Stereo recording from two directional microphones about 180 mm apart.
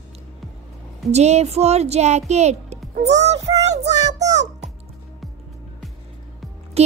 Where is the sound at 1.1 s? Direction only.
35° right (ahead or behind).